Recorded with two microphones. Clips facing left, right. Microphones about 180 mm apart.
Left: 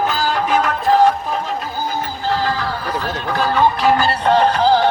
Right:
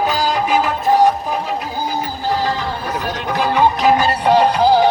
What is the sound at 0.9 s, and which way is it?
Music, 15° right (ahead or behind).